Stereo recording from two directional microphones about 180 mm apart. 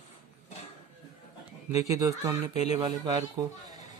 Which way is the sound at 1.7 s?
20° right (ahead or behind).